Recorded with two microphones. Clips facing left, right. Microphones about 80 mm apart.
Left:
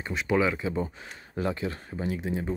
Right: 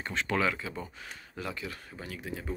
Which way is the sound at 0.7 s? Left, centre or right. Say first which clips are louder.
Left 9 dB; left.